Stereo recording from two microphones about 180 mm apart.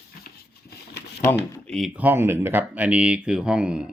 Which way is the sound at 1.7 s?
Centre (ahead or behind).